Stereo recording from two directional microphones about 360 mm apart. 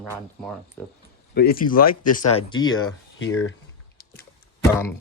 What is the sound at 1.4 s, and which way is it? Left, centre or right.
Speech, left.